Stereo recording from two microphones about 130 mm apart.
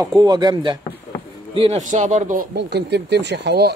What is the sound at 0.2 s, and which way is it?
Speech, 35° right (ahead or behind).